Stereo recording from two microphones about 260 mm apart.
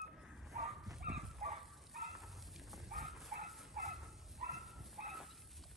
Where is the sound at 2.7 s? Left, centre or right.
Centre.